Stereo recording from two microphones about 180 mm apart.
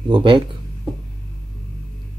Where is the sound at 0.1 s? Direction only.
25° right (ahead or behind).